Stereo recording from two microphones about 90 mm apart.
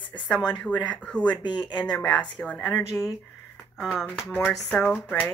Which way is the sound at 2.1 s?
15° left (ahead or behind).